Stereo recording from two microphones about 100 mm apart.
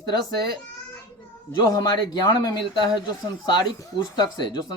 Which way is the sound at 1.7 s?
40° left (ahead or behind).